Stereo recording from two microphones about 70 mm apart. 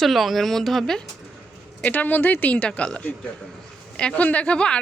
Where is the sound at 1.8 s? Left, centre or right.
Left.